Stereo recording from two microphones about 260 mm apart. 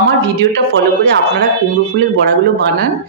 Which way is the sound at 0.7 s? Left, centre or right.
Right.